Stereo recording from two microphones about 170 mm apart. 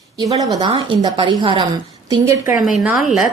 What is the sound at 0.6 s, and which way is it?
A woman's voice, 25° right (ahead or behind).